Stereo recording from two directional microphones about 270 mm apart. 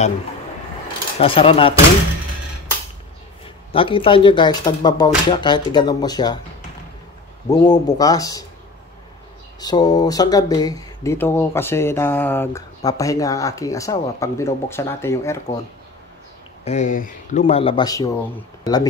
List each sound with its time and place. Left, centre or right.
1.2 s speech: centre
3.7 s speech: centre
7.4 s speech: centre
9.6 s speech: centre
16.6 s speech: left